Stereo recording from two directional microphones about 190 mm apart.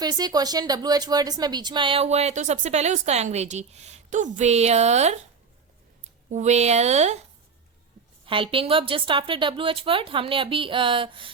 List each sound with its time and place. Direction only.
0.0 s speech: 20° right (ahead or behind); by 5.2 s 35° right (ahead or behind)
6.3 s speech: 35° right (ahead or behind)
8.3 s a woman's voice: 30° right (ahead or behind)